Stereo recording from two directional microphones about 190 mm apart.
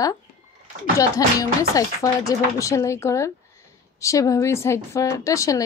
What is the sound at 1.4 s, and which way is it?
A woman's voice, 15° left (ahead or behind).